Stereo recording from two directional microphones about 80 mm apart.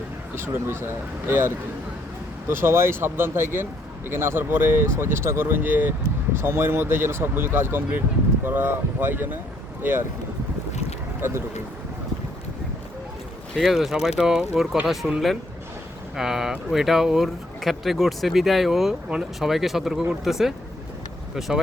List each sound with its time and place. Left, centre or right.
0.3 s speech: right
11.2 s speech: right
13.6 s speech: centre